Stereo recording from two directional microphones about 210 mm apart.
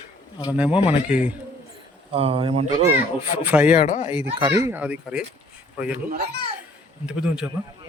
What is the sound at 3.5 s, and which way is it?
Speech, 5° right (ahead or behind).